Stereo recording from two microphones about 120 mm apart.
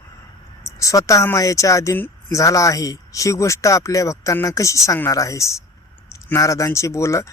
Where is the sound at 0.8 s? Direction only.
25° left (ahead or behind).